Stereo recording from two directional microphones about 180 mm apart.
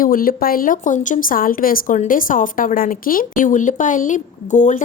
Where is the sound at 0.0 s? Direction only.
50° left (ahead or behind).